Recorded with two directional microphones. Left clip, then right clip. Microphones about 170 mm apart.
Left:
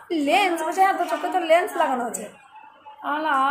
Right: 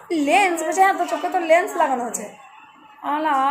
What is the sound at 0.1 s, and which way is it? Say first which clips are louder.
A woman's voice: right 3 dB; 10° left (ahead or behind).